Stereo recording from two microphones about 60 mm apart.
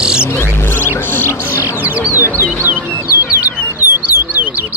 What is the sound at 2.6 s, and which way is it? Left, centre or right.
Music, right.